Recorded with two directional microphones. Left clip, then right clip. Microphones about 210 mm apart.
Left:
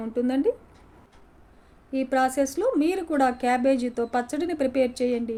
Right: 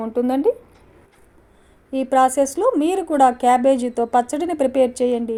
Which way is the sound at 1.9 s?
25° right (ahead or behind).